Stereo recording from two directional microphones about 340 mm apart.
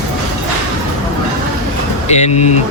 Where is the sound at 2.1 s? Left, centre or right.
Centre.